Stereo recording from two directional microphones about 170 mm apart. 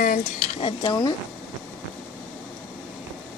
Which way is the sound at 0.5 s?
30° left (ahead or behind).